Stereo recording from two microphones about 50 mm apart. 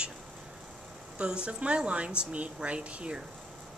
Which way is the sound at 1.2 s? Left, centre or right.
Right.